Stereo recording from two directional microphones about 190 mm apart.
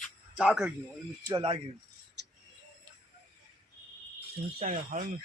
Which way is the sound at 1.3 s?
25° right (ahead or behind).